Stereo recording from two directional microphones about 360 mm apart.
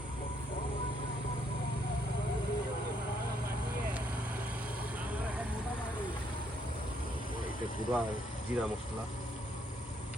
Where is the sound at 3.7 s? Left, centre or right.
Right.